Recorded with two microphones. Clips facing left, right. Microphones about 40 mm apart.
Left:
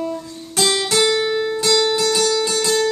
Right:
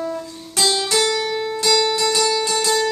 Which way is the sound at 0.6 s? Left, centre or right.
Centre.